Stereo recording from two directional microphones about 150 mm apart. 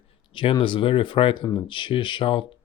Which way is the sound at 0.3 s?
35° left (ahead or behind).